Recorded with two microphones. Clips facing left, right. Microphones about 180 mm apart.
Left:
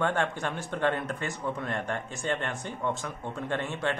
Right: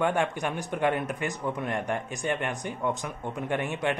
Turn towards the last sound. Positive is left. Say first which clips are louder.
# right 2 dB
turn(degrees=-15)  # may be behind; listen again after turning